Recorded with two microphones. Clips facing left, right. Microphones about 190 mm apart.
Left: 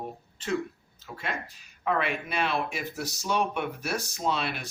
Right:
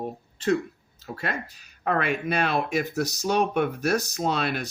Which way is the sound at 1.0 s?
40° right (ahead or behind).